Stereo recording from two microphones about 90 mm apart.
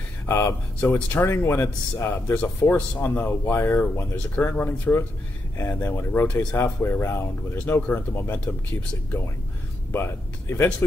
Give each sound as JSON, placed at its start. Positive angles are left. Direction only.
{"t": 0.3, "sound": "speech", "side_deg": 30}
{"t": 0.7, "sound": "speech", "side_deg": 20}
{"t": 9.9, "sound": "speech", "side_deg": 25}